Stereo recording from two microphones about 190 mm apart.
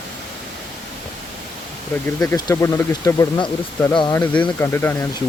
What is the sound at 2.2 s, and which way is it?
Speech, 15° left (ahead or behind).